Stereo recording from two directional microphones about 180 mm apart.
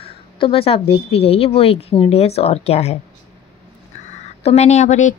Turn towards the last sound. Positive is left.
turn(degrees=40)  # may be behind; listen again after turning